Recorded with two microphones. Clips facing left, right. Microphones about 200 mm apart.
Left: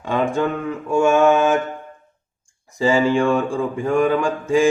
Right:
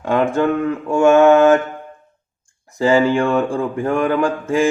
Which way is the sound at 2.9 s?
60° right (ahead or behind).